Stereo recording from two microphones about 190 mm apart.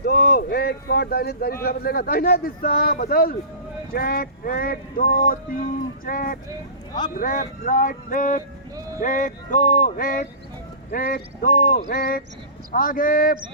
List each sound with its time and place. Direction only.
0.0 s a man's voice: 55° left (ahead or behind)